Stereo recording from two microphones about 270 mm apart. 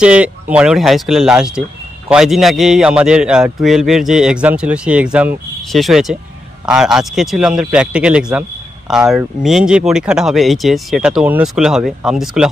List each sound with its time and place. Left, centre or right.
0.0 s speech: centre